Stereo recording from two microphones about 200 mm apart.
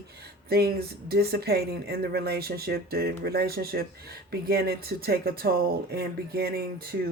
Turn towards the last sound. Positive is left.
turn(degrees=-50)  # may be behind; listen again after turning